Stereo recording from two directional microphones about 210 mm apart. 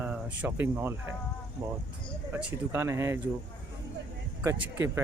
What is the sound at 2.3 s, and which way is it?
Speech, 10° right (ahead or behind).